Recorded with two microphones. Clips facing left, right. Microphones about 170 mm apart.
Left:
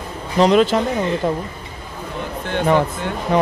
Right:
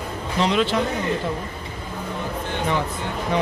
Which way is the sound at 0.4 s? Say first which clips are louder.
Left 7 dB; 45° left (ahead or behind).